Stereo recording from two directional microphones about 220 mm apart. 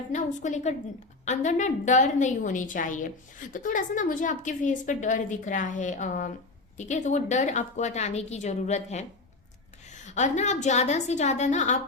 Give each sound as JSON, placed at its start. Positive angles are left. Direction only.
{"t": 0.1, "sound": "a woman's voice", "side_deg": 35}
{"t": 10.1, "sound": "a woman's voice", "side_deg": 35}